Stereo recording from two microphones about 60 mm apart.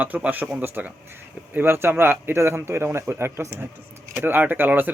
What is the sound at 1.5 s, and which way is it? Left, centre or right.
A man's voice, right.